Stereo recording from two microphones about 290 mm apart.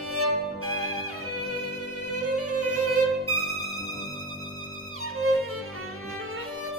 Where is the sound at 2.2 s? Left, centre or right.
Right.